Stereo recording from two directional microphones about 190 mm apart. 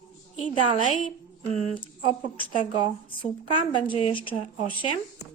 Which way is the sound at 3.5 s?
25° left (ahead or behind).